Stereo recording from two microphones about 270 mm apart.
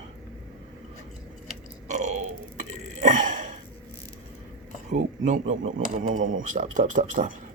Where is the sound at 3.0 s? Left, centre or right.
Right.